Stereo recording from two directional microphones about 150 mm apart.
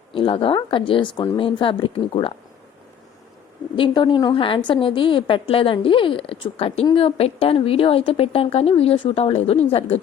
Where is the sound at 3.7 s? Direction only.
35° left (ahead or behind).